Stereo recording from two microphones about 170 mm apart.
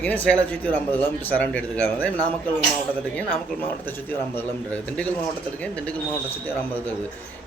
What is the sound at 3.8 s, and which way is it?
Speech, 10° left (ahead or behind).